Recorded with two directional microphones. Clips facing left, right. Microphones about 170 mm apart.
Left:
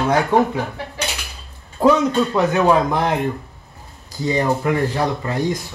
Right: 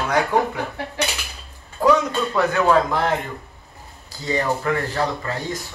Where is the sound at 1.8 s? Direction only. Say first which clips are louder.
Left 3 dB; 20° left (ahead or behind).